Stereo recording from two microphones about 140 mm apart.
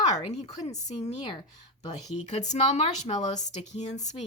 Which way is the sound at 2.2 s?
55° left (ahead or behind).